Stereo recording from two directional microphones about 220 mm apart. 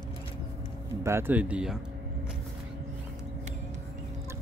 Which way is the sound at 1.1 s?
10° right (ahead or behind).